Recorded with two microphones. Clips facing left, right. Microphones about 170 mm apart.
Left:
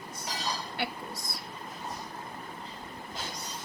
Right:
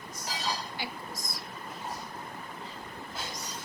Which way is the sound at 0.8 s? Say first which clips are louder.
Left 3 dB; 60° left (ahead or behind).